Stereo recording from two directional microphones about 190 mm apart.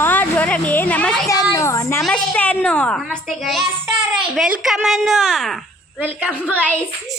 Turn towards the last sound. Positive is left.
turn(degrees=5)  # may be behind; listen again after turning